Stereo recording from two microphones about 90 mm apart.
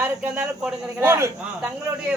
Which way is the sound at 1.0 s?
30° right (ahead or behind).